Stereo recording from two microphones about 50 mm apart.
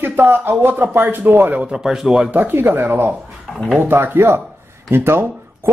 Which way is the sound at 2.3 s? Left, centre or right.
Right.